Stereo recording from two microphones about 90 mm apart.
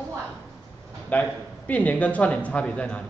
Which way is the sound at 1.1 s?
15° left (ahead or behind).